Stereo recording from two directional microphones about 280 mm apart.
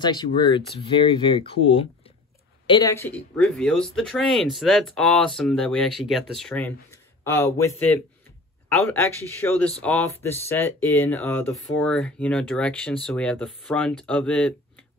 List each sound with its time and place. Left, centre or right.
0.0 s speech: centre